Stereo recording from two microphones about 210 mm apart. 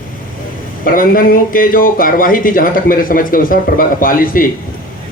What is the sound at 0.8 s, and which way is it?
A man's voice, 40° left (ahead or behind).